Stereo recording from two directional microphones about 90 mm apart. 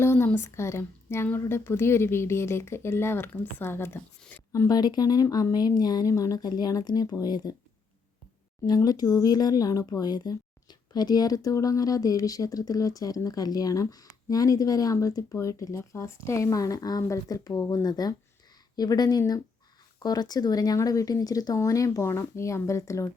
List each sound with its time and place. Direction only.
0.0 s a sound: 30° left (ahead or behind)
0.3 s speech: 30° left (ahead or behind)
4.2 s speech: 15° left (ahead or behind)
4.7 s speech: 50° left (ahead or behind)
8.6 s speech: 50° left (ahead or behind)